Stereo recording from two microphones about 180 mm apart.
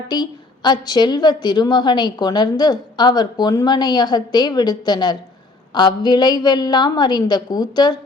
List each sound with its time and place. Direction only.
0.1 s a woman's voice: 25° left (ahead or behind)